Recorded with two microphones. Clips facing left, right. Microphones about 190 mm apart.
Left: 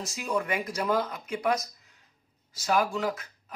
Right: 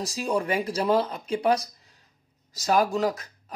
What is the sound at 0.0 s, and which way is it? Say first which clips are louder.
Speech: right 4 dB; 35° right (ahead or behind).